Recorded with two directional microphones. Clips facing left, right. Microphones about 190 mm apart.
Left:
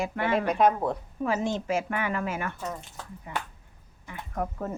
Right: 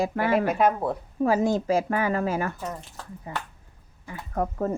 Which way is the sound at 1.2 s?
40° right (ahead or behind).